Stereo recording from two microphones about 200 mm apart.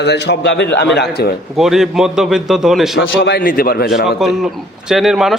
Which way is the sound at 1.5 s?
Centre (ahead or behind).